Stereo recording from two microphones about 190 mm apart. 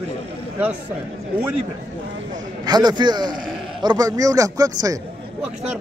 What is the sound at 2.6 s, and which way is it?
A man's voice, 20° right (ahead or behind).